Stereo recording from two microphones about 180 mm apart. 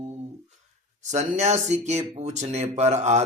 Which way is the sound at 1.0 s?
40° right (ahead or behind).